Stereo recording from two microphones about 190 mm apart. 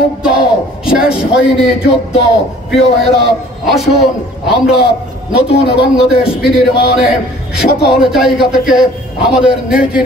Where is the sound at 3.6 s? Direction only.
Centre (ahead or behind).